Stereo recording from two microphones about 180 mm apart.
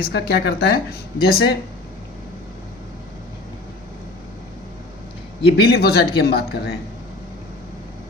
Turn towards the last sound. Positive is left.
turn(degrees=65)  # may be behind; listen again after turning